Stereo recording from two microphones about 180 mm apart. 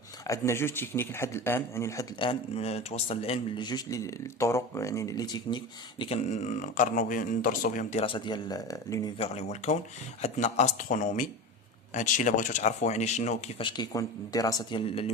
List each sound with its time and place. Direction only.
0.3 s speech: 15° left (ahead or behind)
2.1 s speech: 30° left (ahead or behind)
9.1 s speech: 35° left (ahead or behind)
13.6 s speech: 25° left (ahead or behind)